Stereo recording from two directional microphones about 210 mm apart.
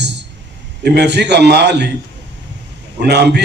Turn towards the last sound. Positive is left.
turn(degrees=-50)  # may be behind; listen again after turning